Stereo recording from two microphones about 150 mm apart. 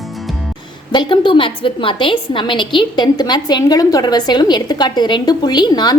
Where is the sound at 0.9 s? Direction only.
35° left (ahead or behind).